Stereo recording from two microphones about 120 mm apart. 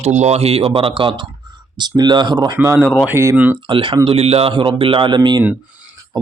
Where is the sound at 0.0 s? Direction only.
70° right (ahead or behind); by 2.6 s 40° right (ahead or behind).